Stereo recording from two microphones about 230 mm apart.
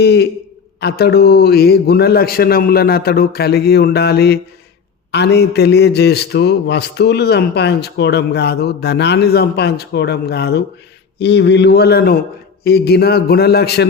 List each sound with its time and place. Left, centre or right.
0.0 s a man's voice: left